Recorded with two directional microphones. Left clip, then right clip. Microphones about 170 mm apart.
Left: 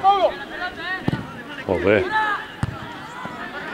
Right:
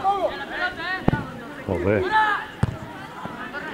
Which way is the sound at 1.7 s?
15° left (ahead or behind).